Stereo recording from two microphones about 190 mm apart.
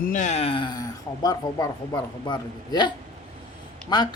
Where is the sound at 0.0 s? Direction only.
40° left (ahead or behind).